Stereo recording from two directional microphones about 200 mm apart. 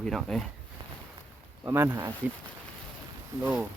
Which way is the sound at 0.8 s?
25° right (ahead or behind).